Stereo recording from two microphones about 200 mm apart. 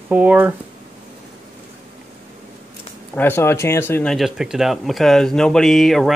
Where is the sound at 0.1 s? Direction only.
5° right (ahead or behind).